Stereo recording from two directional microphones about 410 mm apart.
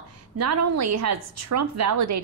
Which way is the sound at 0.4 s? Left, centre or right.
Right.